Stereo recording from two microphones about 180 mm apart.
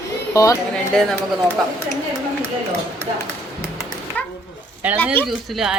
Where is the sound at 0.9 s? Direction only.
5° left (ahead or behind).